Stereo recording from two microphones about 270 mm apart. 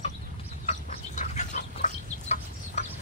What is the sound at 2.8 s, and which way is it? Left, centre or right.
Chicken, left.